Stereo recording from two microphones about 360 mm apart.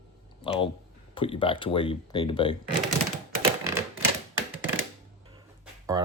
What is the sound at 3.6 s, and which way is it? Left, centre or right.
Typewriter, centre.